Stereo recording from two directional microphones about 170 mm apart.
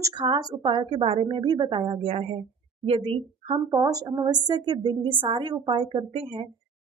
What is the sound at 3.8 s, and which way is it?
A woman's voice, 20° right (ahead or behind).